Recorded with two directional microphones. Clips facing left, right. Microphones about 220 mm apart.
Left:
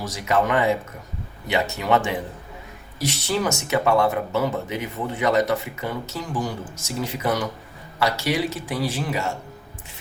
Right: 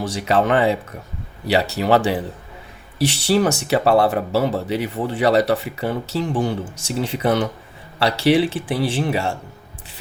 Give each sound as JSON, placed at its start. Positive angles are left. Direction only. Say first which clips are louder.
{"t": 0.0, "sound": "a man's voice", "louder": "right 3 dB", "side_deg": -30}